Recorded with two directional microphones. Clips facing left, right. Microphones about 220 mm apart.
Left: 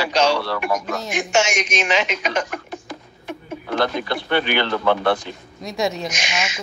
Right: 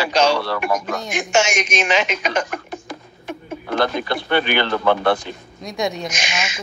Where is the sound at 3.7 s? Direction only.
50° right (ahead or behind).